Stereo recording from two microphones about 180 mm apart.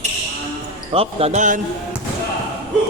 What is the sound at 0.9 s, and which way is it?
Speech, 35° right (ahead or behind).